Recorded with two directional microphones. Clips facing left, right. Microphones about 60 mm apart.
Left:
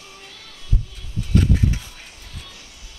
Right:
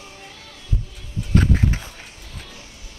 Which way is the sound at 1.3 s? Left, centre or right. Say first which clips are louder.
Right 1 dB; right.